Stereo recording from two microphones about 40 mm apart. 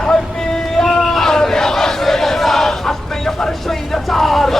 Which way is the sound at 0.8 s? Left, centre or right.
Centre.